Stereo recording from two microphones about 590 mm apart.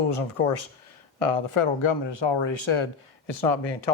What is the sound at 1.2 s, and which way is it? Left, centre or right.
Speech, left.